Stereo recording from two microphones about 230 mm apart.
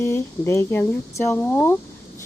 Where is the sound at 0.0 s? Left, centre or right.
Centre.